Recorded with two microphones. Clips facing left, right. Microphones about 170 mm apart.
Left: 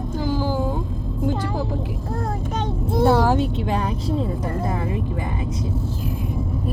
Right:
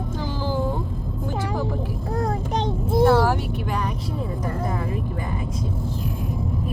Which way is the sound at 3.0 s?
15° left (ahead or behind).